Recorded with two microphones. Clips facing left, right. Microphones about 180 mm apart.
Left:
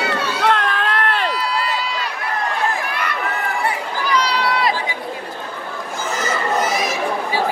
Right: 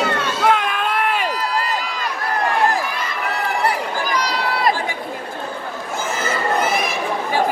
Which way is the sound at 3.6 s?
45° right (ahead or behind).